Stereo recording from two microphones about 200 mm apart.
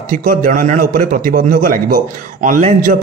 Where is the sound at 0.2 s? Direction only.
40° right (ahead or behind).